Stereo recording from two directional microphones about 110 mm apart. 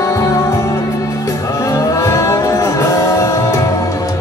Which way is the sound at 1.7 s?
30° left (ahead or behind).